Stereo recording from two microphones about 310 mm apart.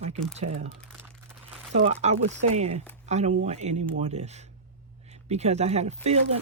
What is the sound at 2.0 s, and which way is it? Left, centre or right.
Speech, right.